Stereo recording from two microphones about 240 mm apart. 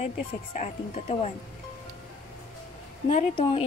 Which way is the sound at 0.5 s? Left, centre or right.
Left.